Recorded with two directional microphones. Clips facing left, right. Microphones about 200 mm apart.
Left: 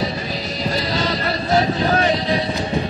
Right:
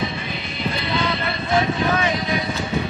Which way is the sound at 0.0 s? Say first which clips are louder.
Left 3 dB; 40° left (ahead or behind).